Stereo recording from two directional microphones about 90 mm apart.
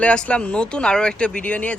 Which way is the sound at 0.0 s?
15° left (ahead or behind).